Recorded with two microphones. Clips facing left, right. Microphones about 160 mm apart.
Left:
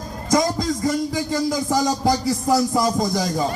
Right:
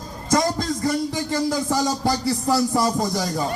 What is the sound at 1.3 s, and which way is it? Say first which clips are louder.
Music: even; 20° left (ahead or behind).